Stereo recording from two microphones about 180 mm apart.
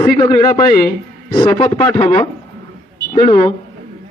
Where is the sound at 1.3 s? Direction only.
30° left (ahead or behind).